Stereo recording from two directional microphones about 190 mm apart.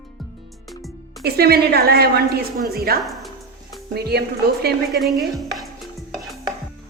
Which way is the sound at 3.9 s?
60° right (ahead or behind).